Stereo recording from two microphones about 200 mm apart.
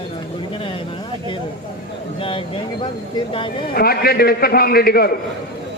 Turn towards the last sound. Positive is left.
turn(degrees=50)  # may be behind; listen again after turning